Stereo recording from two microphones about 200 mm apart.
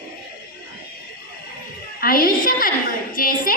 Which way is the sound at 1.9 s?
45° left (ahead or behind).